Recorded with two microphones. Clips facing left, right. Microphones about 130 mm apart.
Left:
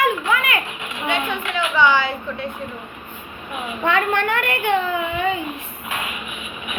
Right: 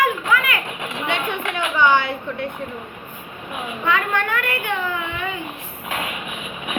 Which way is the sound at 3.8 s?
25° left (ahead or behind).